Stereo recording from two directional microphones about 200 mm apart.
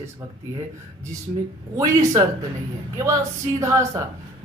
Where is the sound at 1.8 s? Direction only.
15° right (ahead or behind).